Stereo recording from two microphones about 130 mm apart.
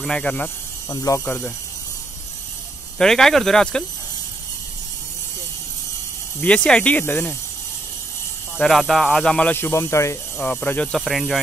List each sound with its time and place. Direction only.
0.0 s speech: 5° left (ahead or behind)
0.8 s speech: 25° left (ahead or behind)
1.2 s speech: 10° left (ahead or behind)
3.0 s speech: 5° left (ahead or behind)
6.4 s speech: 10° left (ahead or behind)
8.5 s speech: centre (ahead or behind)
11.0 s speech: centre (ahead or behind)